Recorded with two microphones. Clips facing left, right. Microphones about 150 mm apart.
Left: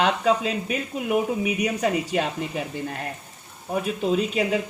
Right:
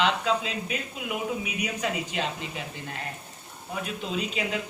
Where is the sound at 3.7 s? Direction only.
45° left (ahead or behind).